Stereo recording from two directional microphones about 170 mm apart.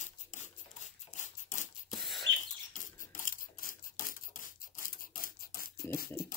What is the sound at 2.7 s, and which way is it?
Rub, 50° left (ahead or behind).